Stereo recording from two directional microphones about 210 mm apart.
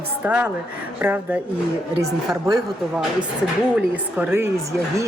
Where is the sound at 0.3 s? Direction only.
5° right (ahead or behind).